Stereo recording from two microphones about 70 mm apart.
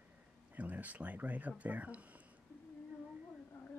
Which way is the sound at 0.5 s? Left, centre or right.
Right.